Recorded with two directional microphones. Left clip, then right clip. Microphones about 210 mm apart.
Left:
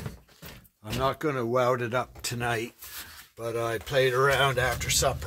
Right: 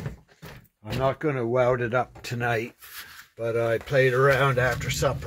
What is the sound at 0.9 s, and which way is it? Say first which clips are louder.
Speech: right 2 dB; 5° left (ahead or behind).